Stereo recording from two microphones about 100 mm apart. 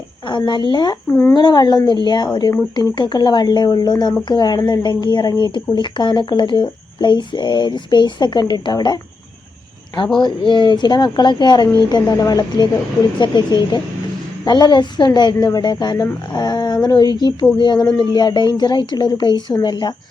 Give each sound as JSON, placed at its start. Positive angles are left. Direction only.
{"t": 0.3, "sound": "speech", "side_deg": 50}
{"t": 10.2, "sound": "speech", "side_deg": 50}